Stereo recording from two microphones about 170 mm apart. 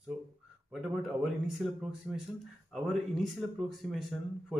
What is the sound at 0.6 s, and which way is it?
Speech, centre (ahead or behind).